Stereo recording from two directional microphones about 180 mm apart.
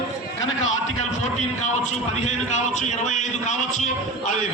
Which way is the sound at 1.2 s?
40° left (ahead or behind).